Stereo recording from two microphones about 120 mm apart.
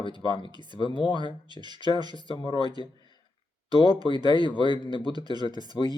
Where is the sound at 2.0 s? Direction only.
35° right (ahead or behind).